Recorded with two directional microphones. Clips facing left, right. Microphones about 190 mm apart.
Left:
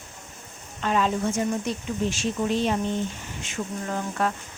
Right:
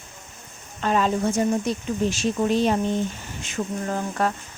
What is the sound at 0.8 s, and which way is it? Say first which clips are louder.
Speech: right 2 dB; 40° right (ahead or behind).